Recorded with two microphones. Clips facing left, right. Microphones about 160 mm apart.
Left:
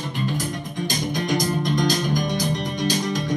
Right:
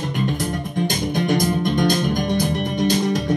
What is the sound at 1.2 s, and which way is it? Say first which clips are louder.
Music: right 4 dB; 55° right (ahead or behind).